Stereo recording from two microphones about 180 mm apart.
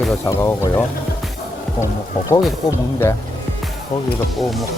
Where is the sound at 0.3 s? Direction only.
15° left (ahead or behind).